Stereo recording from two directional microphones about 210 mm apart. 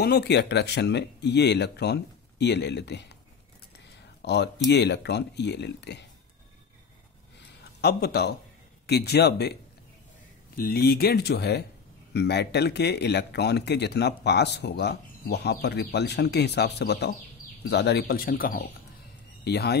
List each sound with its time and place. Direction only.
0.0 s speech: 50° left (ahead or behind)
4.2 s speech: 55° left (ahead or behind)
7.8 s speech: 50° left (ahead or behind)